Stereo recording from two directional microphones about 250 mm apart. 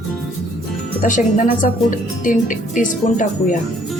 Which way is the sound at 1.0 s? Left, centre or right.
Left.